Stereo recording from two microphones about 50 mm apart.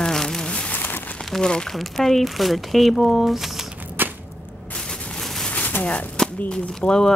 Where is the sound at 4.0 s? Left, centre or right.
Right.